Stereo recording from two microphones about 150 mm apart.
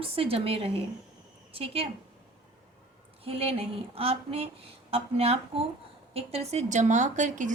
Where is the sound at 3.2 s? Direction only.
40° right (ahead or behind).